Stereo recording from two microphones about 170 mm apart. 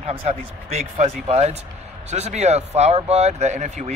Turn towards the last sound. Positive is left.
turn(degrees=-45)  # may be behind; listen again after turning